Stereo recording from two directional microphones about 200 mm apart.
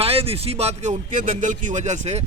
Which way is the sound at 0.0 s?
30° right (ahead or behind).